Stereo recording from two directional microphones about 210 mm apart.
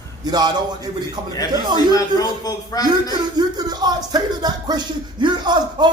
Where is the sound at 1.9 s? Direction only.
15° left (ahead or behind).